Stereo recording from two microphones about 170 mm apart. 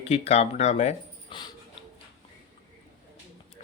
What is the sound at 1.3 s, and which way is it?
Dog, 30° left (ahead or behind).